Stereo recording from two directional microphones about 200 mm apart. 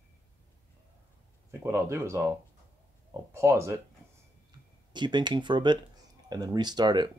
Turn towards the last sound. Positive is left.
turn(degrees=-20)  # may be behind; listen again after turning